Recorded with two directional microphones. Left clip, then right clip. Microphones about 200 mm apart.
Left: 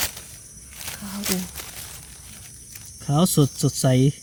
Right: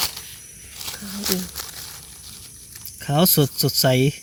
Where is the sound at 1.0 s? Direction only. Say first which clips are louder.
Right 2 dB; 35° left (ahead or behind).